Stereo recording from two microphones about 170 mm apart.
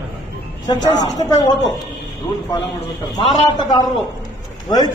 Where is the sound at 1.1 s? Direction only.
25° left (ahead or behind).